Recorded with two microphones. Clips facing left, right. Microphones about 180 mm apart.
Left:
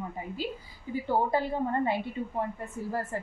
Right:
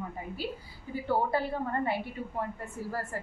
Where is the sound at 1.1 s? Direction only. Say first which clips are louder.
Left 1 dB; 20° left (ahead or behind).